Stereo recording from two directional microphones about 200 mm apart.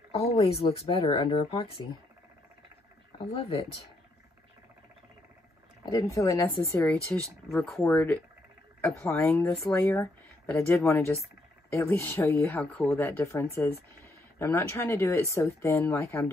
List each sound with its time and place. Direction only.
0.1 s speech: 30° left (ahead or behind)
3.3 s speech: 30° left (ahead or behind)
5.9 s speech: 15° left (ahead or behind)